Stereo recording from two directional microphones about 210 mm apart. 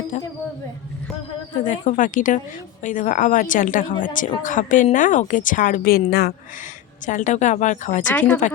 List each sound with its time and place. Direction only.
1.6 s a woman's voice: 40° left (ahead or behind)
8.1 s speech: 5° left (ahead or behind)